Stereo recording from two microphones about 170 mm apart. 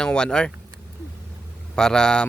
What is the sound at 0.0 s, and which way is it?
Speech, 5° left (ahead or behind).